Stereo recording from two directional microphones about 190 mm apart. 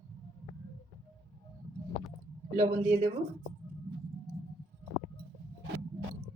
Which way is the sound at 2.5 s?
35° right (ahead or behind).